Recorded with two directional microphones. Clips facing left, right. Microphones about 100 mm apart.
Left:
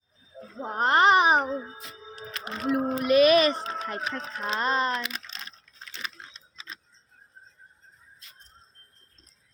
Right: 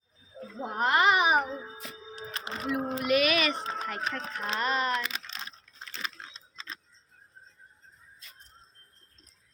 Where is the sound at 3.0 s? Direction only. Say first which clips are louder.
Left 8 dB; 30° left (ahead or behind).